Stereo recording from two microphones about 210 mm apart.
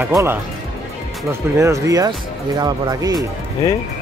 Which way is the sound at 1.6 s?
15° right (ahead or behind).